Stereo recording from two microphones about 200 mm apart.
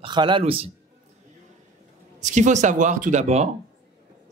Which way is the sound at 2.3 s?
40° right (ahead or behind).